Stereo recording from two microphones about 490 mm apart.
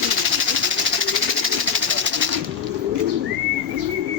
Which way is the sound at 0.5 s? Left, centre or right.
Right.